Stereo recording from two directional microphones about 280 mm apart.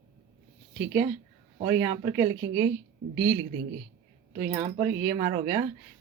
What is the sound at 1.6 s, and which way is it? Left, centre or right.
Speech, centre.